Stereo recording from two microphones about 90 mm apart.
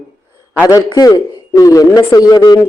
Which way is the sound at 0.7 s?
40° left (ahead or behind).